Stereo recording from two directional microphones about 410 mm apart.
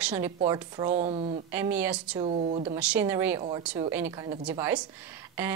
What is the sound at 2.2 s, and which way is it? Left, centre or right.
A woman's voice, centre.